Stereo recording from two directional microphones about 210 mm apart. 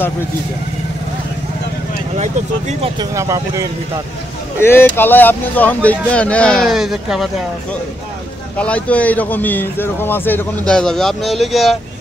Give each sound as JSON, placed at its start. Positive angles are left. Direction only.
{"t": 2.8, "sound": "speech", "side_deg": -20}
{"t": 4.6, "sound": "speech", "side_deg": 10}
{"t": 8.5, "sound": "speech", "side_deg": 5}